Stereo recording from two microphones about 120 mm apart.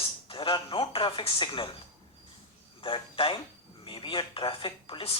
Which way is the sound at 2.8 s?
50° left (ahead or behind).